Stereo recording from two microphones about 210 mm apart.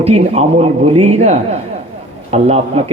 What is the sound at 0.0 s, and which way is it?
A man's voice, 30° right (ahead or behind).